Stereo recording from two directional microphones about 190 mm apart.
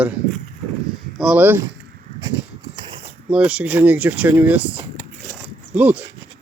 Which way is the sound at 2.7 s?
25° right (ahead or behind).